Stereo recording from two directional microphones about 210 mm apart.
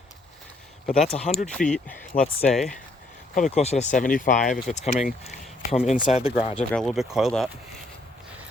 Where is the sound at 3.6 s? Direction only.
30° left (ahead or behind).